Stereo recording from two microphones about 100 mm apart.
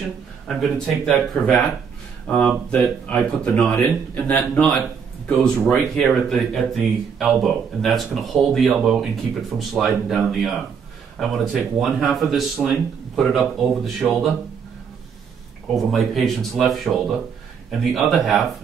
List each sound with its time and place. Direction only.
0.5 s speech: centre (ahead or behind)
15.7 s speech: centre (ahead or behind)